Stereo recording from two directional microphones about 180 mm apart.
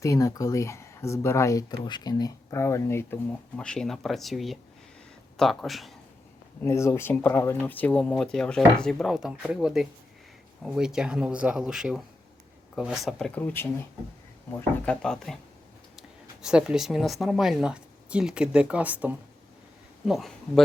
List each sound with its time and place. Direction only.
0.0 s speech: 15° left (ahead or behind)
3.6 s speech: 5° left (ahead or behind)
6.6 s speech: 15° left (ahead or behind)